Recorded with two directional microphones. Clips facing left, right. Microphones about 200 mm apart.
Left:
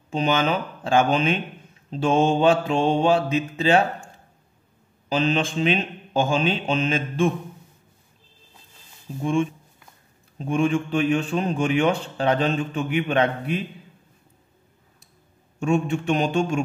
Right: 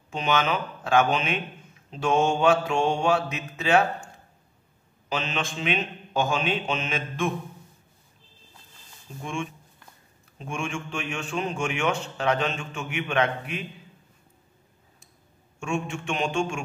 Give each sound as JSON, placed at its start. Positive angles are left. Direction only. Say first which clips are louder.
{"t": 0.1, "sound": "a man's voice", "louder": "left 3 dB", "side_deg": 30}
{"t": 5.1, "sound": "a man's voice", "louder": "left 8 dB", "side_deg": 35}
{"t": 9.2, "sound": "a man's voice", "louder": "left 10 dB", "side_deg": 35}
{"t": 15.6, "sound": "a man's voice", "louder": "left 8 dB", "side_deg": 35}